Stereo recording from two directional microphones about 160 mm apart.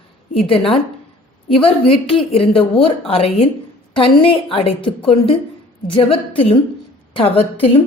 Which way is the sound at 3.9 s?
35° left (ahead or behind).